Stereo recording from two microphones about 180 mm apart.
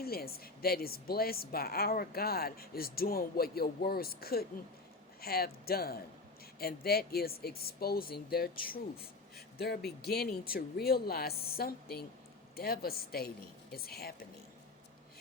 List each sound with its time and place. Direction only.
0.0 s a woman's voice: 60° left (ahead or behind)